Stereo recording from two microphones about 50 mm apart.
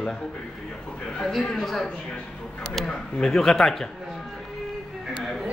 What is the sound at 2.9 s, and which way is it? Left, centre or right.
Speech, centre.